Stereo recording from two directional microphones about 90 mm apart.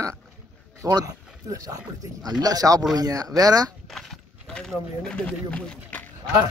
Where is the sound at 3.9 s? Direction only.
5° left (ahead or behind).